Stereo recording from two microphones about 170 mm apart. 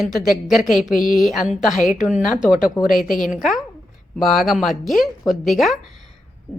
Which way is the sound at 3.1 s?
55° left (ahead or behind).